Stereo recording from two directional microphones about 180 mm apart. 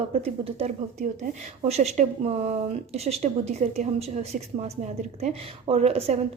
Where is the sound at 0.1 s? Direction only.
35° right (ahead or behind).